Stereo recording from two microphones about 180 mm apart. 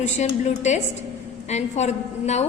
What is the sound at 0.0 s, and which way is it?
A woman's voice, 40° left (ahead or behind).